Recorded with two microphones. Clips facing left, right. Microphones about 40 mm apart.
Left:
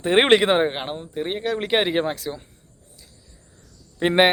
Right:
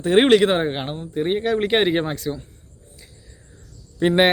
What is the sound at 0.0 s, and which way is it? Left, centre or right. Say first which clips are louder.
A man's voice: right 2 dB; left.